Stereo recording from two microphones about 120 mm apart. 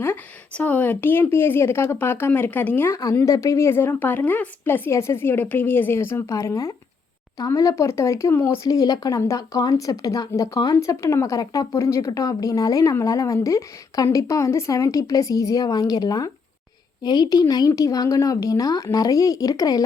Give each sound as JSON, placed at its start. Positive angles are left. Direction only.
{"t": 0.0, "sound": "a woman's voice", "side_deg": 15}